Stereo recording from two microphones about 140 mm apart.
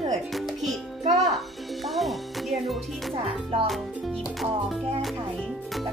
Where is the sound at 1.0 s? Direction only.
50° right (ahead or behind).